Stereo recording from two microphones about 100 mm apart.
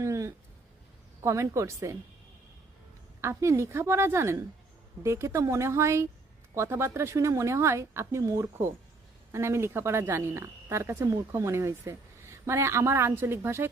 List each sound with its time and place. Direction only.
0.0 s a sound: 30° right (ahead or behind)
1.2 s a woman's voice: 30° right (ahead or behind)
3.2 s speech: 30° right (ahead or behind)